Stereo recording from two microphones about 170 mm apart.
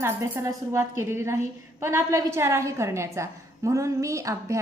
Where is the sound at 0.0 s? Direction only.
15° right (ahead or behind).